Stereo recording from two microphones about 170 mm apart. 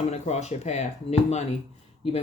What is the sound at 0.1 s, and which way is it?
Speech, 40° left (ahead or behind).